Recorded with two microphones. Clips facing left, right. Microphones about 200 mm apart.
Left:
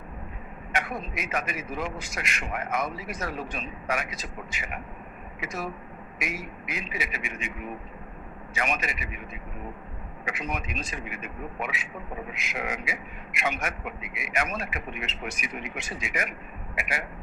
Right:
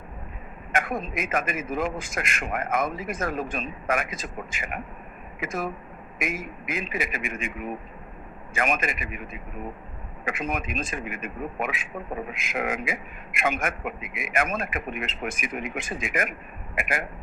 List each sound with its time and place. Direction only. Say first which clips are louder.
0.7 s a man's voice: right 4 dB; 50° right (ahead or behind)
8.5 s a man's voice: right 4 dB; 50° right (ahead or behind)